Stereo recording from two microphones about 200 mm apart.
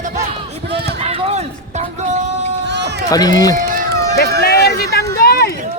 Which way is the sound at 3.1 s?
20° left (ahead or behind).